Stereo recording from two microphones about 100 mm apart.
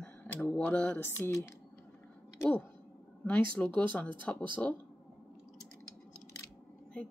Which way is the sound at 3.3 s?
10° left (ahead or behind).